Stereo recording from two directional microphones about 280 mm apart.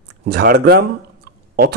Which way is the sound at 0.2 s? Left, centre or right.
Right.